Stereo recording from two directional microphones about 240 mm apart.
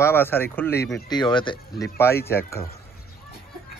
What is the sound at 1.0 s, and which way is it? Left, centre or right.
Speech, centre.